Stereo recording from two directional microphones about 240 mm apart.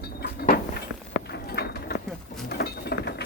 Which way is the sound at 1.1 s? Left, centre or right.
Left.